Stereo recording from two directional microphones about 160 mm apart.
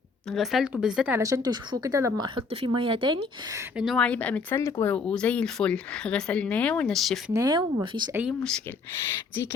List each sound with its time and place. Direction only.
0.3 s speech: centre (ahead or behind)
1.2 s a woman's voice: 25° right (ahead or behind)
2.2 s speech: 35° right (ahead or behind)
3.8 s speech: centre (ahead or behind)
7.3 s a woman's voice: 25° right (ahead or behind)
8.4 s speech: 5° left (ahead or behind)